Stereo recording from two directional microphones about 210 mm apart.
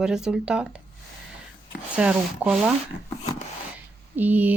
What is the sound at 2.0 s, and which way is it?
Speech, 5° right (ahead or behind).